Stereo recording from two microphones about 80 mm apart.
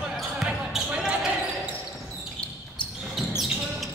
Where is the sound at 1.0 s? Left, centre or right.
Centre.